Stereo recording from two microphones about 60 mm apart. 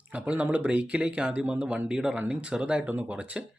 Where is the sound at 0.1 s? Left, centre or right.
Right.